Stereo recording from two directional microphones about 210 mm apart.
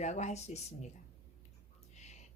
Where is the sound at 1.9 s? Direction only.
35° left (ahead or behind).